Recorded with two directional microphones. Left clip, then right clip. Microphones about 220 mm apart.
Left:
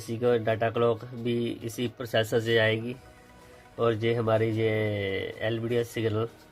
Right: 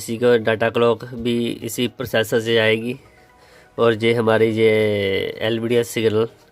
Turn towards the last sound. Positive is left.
turn(degrees=-40)  # may be behind; listen again after turning